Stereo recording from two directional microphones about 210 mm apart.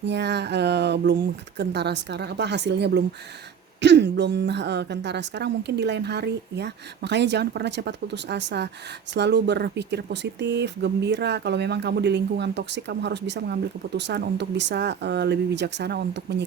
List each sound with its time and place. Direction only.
0.0 s speech: 55° right (ahead or behind)